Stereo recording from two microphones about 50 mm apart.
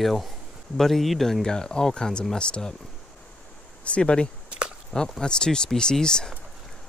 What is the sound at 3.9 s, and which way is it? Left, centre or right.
Speech, left.